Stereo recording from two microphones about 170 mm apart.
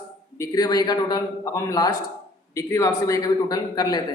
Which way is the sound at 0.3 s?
20° left (ahead or behind).